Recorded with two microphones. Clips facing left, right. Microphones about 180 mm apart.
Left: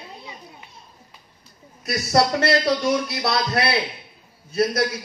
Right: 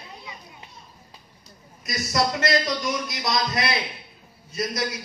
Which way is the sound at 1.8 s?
65° left (ahead or behind).